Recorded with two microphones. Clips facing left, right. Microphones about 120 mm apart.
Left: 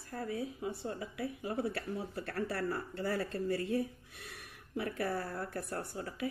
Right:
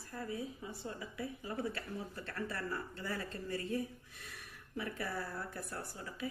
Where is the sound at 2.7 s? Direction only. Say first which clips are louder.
Left 5 dB; 35° left (ahead or behind).